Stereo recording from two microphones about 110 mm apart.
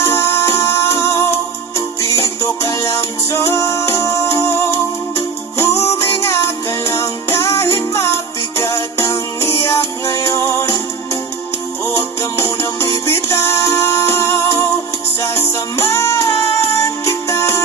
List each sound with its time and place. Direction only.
0.0 s music: 25° left (ahead or behind)
12.2 s music: 25° left (ahead or behind)